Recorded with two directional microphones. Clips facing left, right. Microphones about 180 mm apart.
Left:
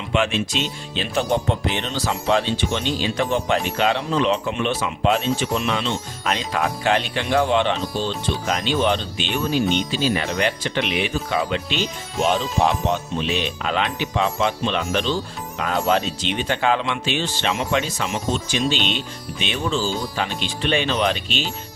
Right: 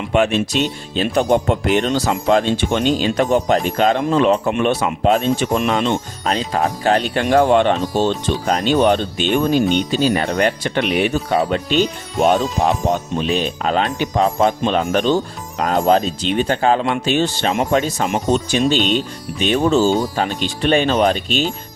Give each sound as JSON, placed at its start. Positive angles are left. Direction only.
{"t": 0.1, "sound": "speech", "side_deg": -50}
{"t": 6.2, "sound": "speech", "side_deg": -35}